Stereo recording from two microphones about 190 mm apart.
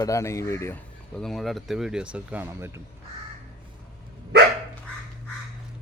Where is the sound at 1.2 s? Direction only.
Centre (ahead or behind).